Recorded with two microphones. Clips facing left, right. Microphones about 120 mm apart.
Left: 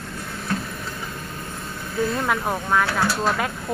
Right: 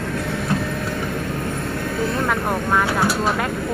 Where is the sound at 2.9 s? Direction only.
15° right (ahead or behind).